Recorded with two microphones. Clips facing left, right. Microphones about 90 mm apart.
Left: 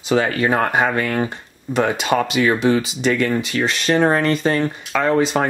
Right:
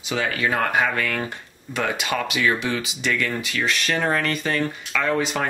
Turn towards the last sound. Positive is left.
turn(degrees=35)  # may be behind; listen again after turning